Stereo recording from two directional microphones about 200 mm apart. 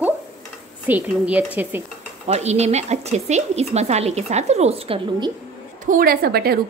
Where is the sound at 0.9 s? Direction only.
10° right (ahead or behind).